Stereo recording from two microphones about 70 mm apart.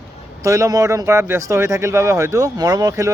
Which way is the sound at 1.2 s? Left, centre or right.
Right.